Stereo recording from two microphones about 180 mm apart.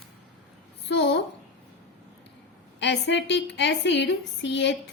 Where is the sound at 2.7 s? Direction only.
75° left (ahead or behind).